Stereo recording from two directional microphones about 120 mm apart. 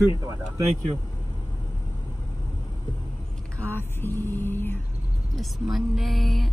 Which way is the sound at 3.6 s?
15° left (ahead or behind).